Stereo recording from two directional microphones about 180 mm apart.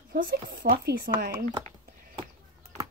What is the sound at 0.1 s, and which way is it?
Speech, 60° right (ahead or behind).